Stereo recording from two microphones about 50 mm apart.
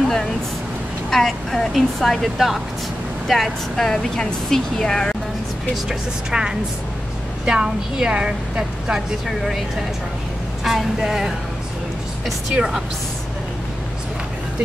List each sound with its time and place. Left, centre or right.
1.1 s speech: centre
5.9 s a woman's voice: centre
9.3 s a woman's voice: centre
12.5 s a woman's voice: centre